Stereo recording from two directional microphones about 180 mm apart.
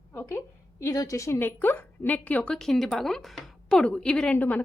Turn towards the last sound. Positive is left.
turn(degrees=10)  # may be behind; listen again after turning